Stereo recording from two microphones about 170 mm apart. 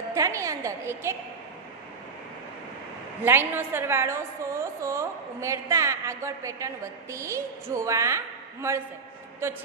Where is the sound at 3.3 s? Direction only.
15° right (ahead or behind).